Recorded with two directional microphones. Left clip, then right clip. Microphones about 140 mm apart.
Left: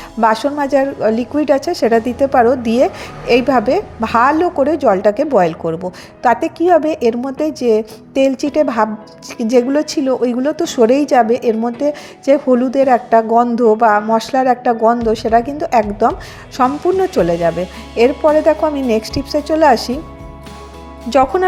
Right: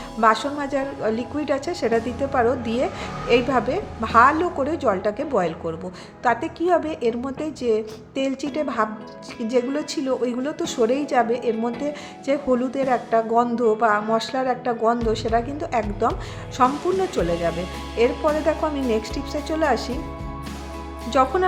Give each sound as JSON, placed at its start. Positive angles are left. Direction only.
{"t": 0.2, "sound": "a woman's voice", "side_deg": 40}
{"t": 16.6, "sound": "speech", "side_deg": 0}
{"t": 17.0, "sound": "a woman's voice", "side_deg": 40}